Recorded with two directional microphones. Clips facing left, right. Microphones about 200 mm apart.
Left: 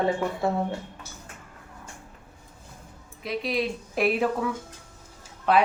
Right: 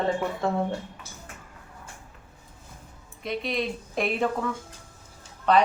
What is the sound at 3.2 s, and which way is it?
Speech, centre (ahead or behind).